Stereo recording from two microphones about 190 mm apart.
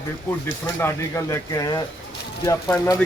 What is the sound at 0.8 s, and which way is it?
Speech, 15° left (ahead or behind).